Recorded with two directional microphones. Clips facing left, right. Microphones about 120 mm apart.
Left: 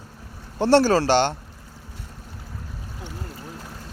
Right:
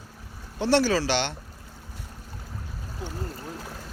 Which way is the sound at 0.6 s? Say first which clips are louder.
Left 5 dB; 45° left (ahead or behind).